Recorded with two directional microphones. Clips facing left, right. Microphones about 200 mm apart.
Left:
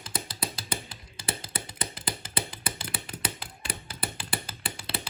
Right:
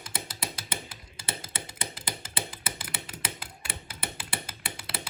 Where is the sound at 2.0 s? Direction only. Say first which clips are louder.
Left 3 dB; 25° right (ahead or behind).